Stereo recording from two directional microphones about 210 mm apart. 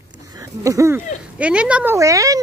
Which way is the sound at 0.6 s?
15° right (ahead or behind).